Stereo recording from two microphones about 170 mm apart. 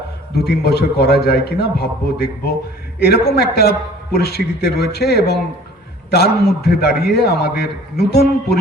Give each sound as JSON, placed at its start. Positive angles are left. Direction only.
{"t": 0.4, "sound": "a man's voice", "side_deg": 75}